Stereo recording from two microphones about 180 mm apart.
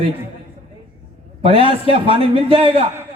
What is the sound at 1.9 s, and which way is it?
Speech, 30° right (ahead or behind).